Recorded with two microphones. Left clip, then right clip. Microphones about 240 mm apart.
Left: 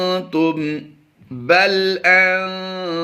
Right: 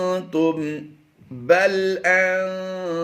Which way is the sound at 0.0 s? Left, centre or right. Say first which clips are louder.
Left 3 dB; centre.